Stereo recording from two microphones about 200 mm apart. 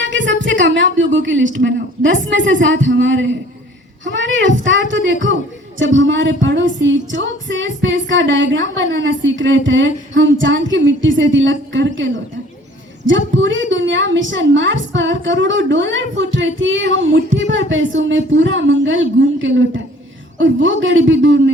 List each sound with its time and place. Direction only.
0.0 s female singing: 65° right (ahead or behind)